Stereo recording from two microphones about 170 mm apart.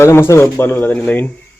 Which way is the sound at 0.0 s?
15° left (ahead or behind).